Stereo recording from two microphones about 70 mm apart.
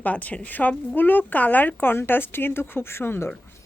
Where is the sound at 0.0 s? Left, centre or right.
Left.